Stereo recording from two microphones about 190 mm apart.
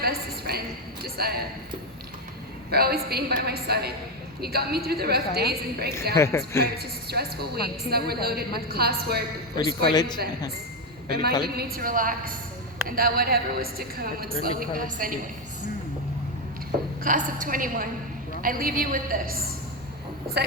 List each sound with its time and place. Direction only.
0.0 s a sound: 55° right (ahead or behind)
2.6 s a woman's voice: 55° right (ahead or behind)
6.1 s speech: 15° left (ahead or behind)
6.7 s a woman's voice: 55° right (ahead or behind)
9.6 s a man's voice: 20° left (ahead or behind)
11.4 s a woman's voice: 55° right (ahead or behind)
17.0 s a woman's voice: 45° right (ahead or behind)